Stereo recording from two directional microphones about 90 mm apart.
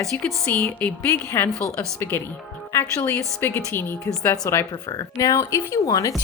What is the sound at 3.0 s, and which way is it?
Speech, 25° left (ahead or behind).